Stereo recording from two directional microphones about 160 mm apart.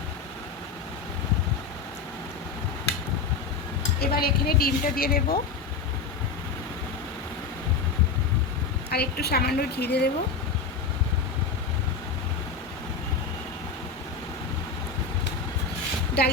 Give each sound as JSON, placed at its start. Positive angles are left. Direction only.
{"t": 4.0, "sound": "a woman's voice", "side_deg": 75}
{"t": 8.9, "sound": "speech", "side_deg": 85}
{"t": 16.2, "sound": "speech", "side_deg": 90}